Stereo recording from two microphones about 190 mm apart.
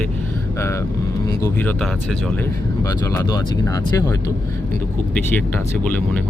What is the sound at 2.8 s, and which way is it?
Speech, 20° left (ahead or behind).